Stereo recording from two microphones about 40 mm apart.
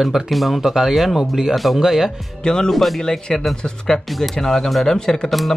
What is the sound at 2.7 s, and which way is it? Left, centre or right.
Speech, centre.